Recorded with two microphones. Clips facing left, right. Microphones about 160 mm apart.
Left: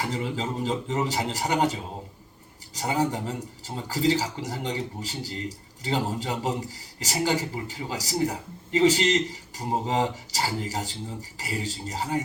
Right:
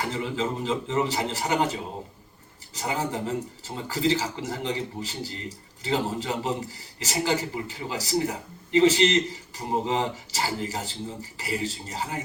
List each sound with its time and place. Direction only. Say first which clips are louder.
0.1 s a man's voice: right 1 dB; 40° left (ahead or behind)